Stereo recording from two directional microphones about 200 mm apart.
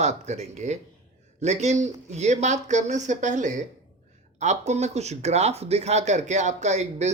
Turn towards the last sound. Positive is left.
turn(degrees=-35)  # may be behind; listen again after turning